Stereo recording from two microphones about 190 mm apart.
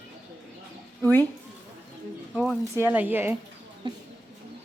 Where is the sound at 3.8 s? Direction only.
25° right (ahead or behind).